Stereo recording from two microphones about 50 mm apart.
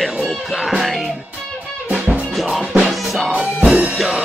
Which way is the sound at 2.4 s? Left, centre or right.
Centre.